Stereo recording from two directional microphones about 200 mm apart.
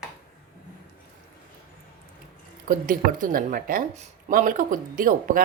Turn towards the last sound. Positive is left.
turn(degrees=-45)  # may be behind; listen again after turning